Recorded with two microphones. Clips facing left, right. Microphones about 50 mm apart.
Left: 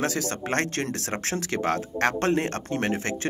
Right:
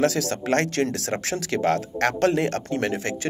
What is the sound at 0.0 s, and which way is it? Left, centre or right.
Speech, left.